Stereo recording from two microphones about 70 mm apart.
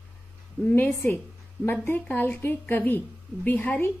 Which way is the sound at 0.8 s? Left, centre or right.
Left.